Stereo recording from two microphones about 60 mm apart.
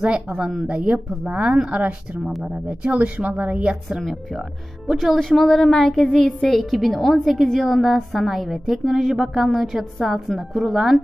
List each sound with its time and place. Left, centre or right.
0.3 s speech: centre
2.2 s speech: centre
2.5 s speech: right
3.9 s a woman's voice: centre
6.2 s a woman's voice: centre